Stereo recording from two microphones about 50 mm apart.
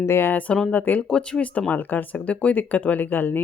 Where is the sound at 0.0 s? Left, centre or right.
Left.